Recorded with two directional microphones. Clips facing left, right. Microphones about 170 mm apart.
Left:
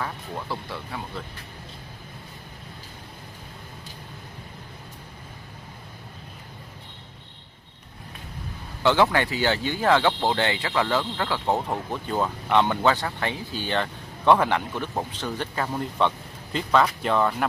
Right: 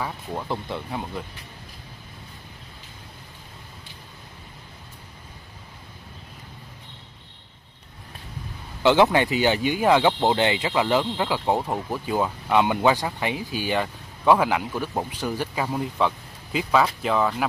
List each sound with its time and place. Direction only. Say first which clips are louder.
0.0 s speech: right 2 dB; 20° right (ahead or behind)
8.8 s speech: right 3 dB; 15° right (ahead or behind); by 17.5 s centre (ahead or behind)